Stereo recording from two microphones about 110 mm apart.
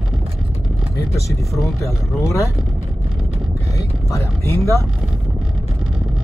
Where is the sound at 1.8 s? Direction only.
30° left (ahead or behind).